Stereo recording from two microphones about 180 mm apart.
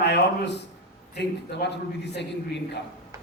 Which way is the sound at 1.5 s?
70° left (ahead or behind).